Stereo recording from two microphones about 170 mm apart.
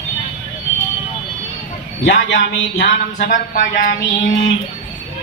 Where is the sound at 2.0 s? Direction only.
90° left.